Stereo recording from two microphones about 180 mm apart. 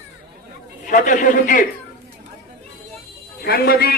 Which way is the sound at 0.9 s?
45° left (ahead or behind).